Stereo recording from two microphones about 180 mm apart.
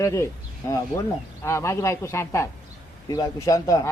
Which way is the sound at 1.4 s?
15° left (ahead or behind).